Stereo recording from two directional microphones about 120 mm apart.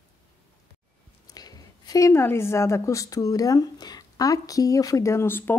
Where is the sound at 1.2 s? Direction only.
30° left (ahead or behind).